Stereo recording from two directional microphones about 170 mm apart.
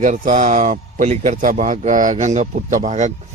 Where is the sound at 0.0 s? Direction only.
50° right (ahead or behind).